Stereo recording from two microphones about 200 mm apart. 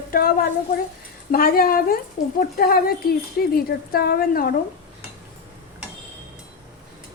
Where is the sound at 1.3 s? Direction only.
45° left (ahead or behind).